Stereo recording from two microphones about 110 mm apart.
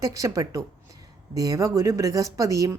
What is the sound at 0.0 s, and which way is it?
Speech, 30° right (ahead or behind).